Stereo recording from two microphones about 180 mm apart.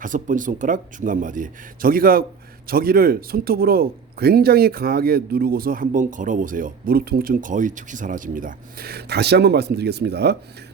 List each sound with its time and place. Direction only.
0.0 s speech: 45° right (ahead or behind); by 10.3 s 65° right (ahead or behind)